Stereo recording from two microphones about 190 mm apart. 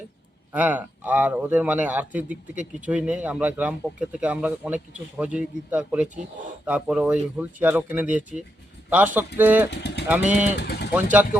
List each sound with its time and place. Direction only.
0.5 s a man's voice: 10° right (ahead or behind)
9.6 s speech: 65° left (ahead or behind)
10.1 s a man's voice: 10° right (ahead or behind)
10.6 s speech: 60° left (ahead or behind)
10.9 s a man's voice: 10° right (ahead or behind)